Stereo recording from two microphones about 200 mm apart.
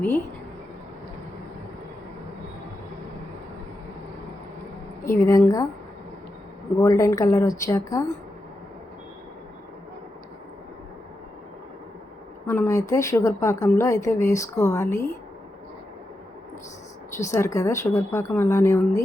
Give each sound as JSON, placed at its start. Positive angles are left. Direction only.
{"t": 5.2, "sound": "speech", "side_deg": 15}
{"t": 6.7, "sound": "speech", "side_deg": 15}
{"t": 12.5, "sound": "speech", "side_deg": 15}
{"t": 17.2, "sound": "speech", "side_deg": 15}